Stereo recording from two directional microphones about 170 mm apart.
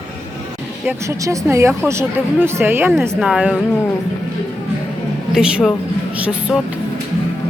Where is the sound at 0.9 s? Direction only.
15° right (ahead or behind).